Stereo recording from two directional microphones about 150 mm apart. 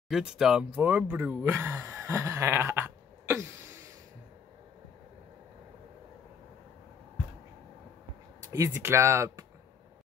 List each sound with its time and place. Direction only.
0.1 s speech: 5° right (ahead or behind)
8.4 s speech: 20° right (ahead or behind)